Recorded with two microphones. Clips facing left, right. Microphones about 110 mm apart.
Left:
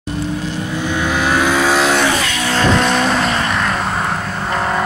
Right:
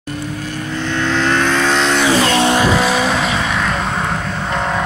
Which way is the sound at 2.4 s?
15° right (ahead or behind).